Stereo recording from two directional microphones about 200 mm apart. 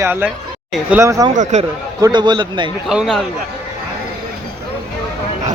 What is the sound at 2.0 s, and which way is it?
Speech, 20° right (ahead or behind).